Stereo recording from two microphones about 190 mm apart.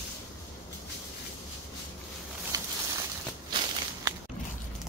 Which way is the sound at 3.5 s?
25° right (ahead or behind).